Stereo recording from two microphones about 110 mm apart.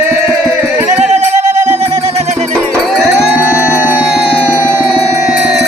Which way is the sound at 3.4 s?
20° right (ahead or behind).